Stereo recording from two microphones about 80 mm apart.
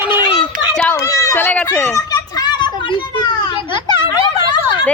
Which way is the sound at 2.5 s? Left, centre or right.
Left.